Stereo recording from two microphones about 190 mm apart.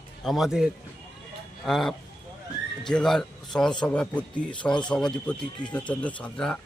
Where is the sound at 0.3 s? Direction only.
Centre (ahead or behind).